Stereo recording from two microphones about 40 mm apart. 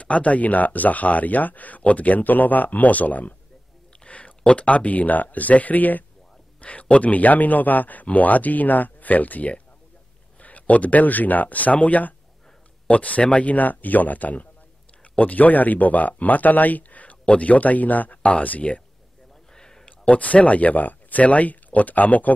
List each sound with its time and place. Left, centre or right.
0.0 s speech: left
4.0 s a sound: left
4.4 s speech: left
6.6 s speech: left
19.5 s a sound: centre
20.1 s speech: left